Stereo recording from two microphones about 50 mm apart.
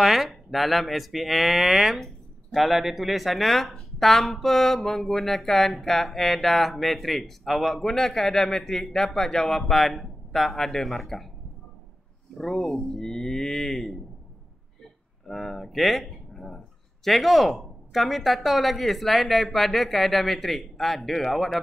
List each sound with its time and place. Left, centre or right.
0.0 s speech: centre
12.4 s speech: centre
15.2 s speech: centre